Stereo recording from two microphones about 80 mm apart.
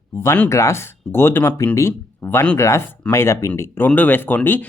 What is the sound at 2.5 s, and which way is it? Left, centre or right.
Speech, left.